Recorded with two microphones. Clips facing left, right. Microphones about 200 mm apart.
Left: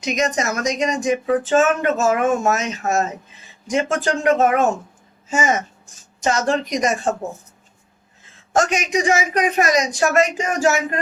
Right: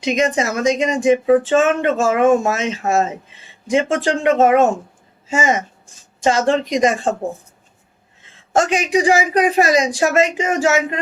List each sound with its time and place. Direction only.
0.0 s speech: 30° right (ahead or behind)
8.5 s speech: 30° right (ahead or behind)